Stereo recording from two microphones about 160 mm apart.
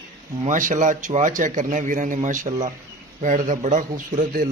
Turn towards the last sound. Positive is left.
turn(degrees=-55)  # may be behind; listen again after turning